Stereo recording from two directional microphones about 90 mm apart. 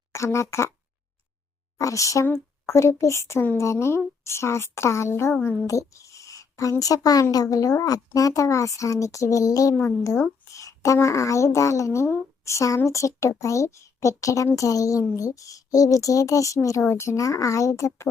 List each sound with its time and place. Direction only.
0.1 s speech: 30° left (ahead or behind)
1.8 s a woman's voice: 35° left (ahead or behind)